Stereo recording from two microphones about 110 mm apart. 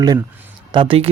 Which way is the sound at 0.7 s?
55° right (ahead or behind).